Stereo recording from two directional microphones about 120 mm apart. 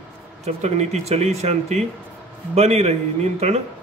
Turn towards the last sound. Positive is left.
turn(degrees=-65)  # may be behind; listen again after turning